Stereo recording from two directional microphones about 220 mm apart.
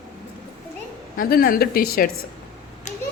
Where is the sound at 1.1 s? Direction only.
40° left (ahead or behind).